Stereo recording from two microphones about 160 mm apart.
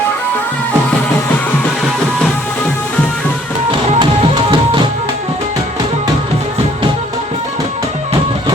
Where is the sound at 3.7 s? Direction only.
30° right (ahead or behind).